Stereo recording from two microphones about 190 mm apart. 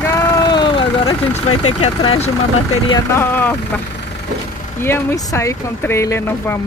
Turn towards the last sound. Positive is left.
turn(degrees=15)  # may be behind; listen again after turning